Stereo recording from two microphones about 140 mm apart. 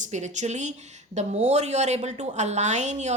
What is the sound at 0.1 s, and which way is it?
A woman's voice, 55° right (ahead or behind).